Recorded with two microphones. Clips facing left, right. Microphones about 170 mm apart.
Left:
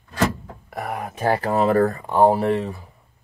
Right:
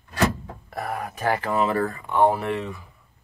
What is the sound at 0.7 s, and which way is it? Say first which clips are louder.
Speech: left 1 dB; 15° left (ahead or behind).